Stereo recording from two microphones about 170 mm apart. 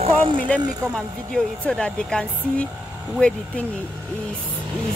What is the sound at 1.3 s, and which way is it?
Speech, 5° left (ahead or behind).